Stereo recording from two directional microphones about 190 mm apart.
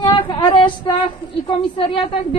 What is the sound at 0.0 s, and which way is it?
Female singing, 25° left (ahead or behind).